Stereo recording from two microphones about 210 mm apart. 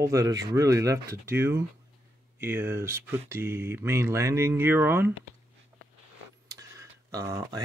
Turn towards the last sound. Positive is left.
turn(degrees=-15)  # may be behind; listen again after turning